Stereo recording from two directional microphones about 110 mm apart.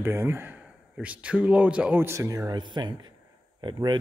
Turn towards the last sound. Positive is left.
turn(degrees=-45)  # may be behind; listen again after turning